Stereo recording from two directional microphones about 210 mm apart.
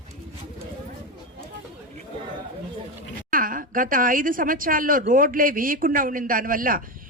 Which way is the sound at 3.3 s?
40° right (ahead or behind).